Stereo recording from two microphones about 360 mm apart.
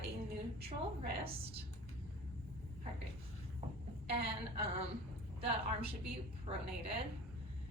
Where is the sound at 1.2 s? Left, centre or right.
Centre.